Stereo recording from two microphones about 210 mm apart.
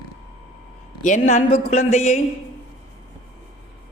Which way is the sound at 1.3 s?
35° left (ahead or behind).